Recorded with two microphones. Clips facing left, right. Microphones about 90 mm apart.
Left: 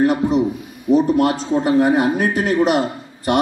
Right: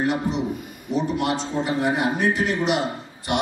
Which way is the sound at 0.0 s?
45° left (ahead or behind).